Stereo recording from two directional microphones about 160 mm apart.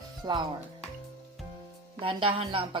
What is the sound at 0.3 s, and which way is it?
Speech, 30° right (ahead or behind).